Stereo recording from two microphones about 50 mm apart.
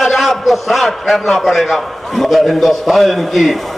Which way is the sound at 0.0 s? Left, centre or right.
Centre.